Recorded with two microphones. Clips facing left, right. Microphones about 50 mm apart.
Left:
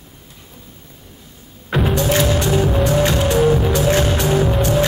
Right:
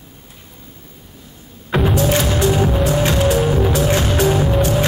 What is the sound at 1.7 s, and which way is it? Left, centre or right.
Music, centre.